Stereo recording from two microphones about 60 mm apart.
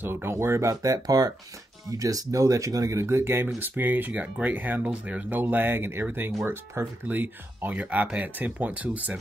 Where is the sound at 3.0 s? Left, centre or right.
Right.